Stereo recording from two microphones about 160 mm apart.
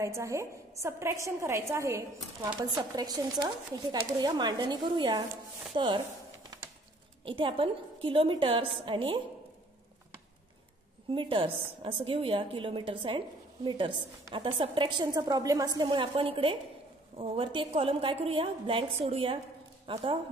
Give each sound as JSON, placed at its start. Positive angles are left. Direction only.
{"t": 0.0, "sound": "a woman's voice", "side_deg": -20}
{"t": 7.2, "sound": "a woman's voice", "side_deg": -30}
{"t": 11.1, "sound": "a woman's voice", "side_deg": -35}